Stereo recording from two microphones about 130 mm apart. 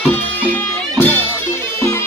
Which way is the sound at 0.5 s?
15° left (ahead or behind).